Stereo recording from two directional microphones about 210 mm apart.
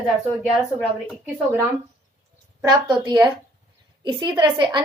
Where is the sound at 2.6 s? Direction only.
15° right (ahead or behind).